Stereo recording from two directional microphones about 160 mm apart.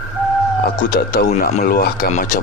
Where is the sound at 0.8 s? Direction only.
65° left (ahead or behind).